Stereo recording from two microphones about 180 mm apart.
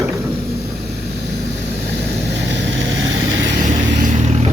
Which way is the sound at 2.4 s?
80° right.